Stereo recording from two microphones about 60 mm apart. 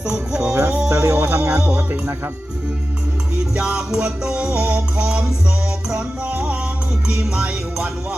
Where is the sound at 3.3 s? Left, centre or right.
Centre.